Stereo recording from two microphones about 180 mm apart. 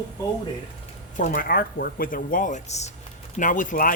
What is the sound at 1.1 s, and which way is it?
Speech, 45° left (ahead or behind).